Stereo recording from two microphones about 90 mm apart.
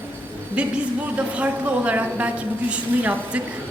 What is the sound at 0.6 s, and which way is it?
A woman's voice, 10° right (ahead or behind).